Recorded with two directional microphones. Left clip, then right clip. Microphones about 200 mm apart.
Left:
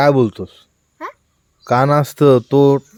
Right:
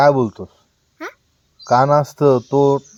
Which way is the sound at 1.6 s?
50° left (ahead or behind).